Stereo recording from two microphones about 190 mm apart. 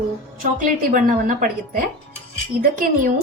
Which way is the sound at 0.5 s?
45° right (ahead or behind).